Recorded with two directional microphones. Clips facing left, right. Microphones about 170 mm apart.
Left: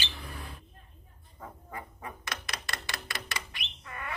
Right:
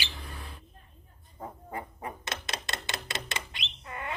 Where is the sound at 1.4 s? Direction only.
30° right (ahead or behind).